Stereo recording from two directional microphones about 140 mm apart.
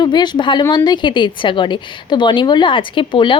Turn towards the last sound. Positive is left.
turn(degrees=35)  # may be behind; listen again after turning